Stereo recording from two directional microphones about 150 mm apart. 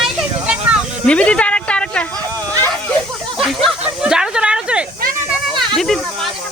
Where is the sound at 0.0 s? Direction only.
5° right (ahead or behind).